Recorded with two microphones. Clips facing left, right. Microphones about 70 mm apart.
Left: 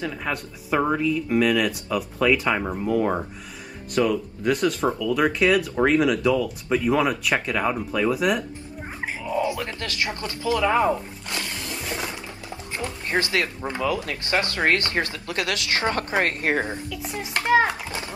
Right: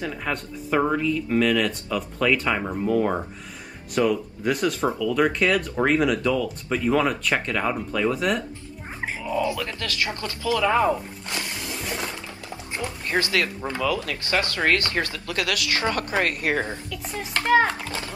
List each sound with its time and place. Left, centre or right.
0.0 s speech: centre
9.3 s speech: left
11.2 s a sound: centre
11.5 s a sound: centre
13.1 s speech: left
16.9 s a child's voice: centre